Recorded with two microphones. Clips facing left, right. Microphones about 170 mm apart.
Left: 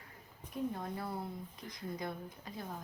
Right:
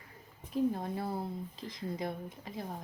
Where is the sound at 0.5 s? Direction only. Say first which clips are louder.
Right 7 dB; 30° right (ahead or behind).